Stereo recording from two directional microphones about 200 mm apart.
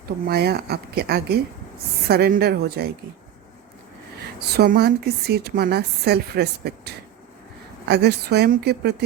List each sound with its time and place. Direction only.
0.3 s a woman's voice: 50° right (ahead or behind)
4.4 s a woman's voice: 50° right (ahead or behind)